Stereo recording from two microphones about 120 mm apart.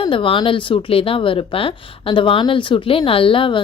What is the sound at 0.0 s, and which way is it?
A woman's voice, 45° left (ahead or behind).